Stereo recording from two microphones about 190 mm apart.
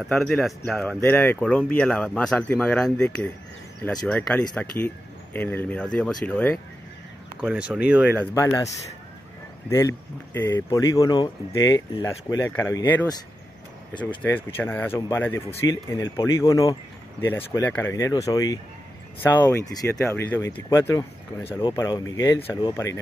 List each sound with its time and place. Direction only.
0.0 s speech: centre (ahead or behind)
7.4 s speech: 5° right (ahead or behind)
8.4 s speech: 15° left (ahead or behind)
9.7 s speech: 15° left (ahead or behind)
21.5 s speech: 25° left (ahead or behind)